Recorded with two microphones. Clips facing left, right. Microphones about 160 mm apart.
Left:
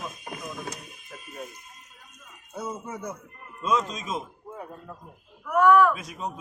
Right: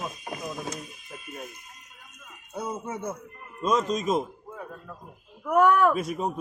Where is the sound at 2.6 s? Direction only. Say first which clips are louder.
Right 2 dB; 20° right (ahead or behind).